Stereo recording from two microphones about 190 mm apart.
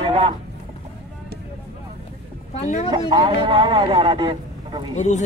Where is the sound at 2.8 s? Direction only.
25° right (ahead or behind).